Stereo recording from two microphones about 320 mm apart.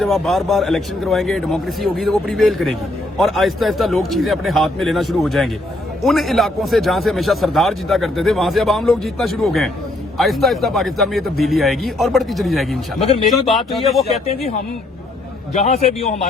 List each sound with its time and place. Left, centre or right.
0.0 s a man's voice: centre
13.0 s speech: centre
13.5 s a man's voice: centre
15.5 s a man's voice: centre